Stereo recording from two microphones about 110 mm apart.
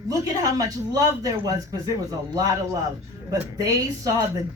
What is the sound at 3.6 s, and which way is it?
Speech, 35° right (ahead or behind).